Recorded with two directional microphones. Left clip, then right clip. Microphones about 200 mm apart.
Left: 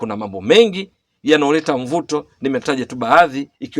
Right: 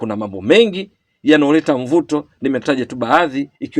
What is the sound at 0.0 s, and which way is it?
A man's voice, 30° left (ahead or behind).